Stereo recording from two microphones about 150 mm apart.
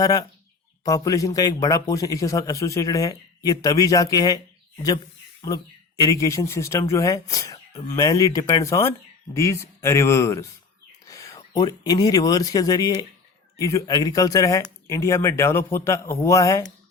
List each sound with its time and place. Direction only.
0.0 s speech: 25° left (ahead or behind)
6.1 s speech: 20° left (ahead or behind)